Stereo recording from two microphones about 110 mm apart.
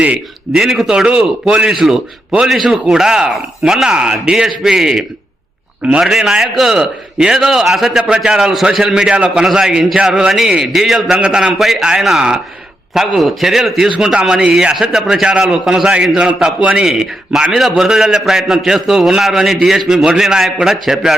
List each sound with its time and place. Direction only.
0.0 s a man's voice: 10° right (ahead or behind)